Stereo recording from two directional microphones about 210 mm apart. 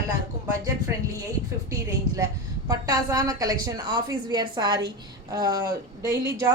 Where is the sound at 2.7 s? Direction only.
15° right (ahead or behind).